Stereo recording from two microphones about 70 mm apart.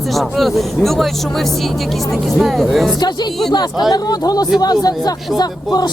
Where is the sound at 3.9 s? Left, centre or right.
Left.